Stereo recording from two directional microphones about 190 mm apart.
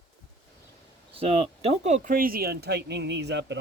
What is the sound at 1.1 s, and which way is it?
Speech, 30° right (ahead or behind).